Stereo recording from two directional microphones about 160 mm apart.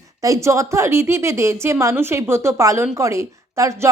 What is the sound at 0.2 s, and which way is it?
A woman's voice, 20° right (ahead or behind).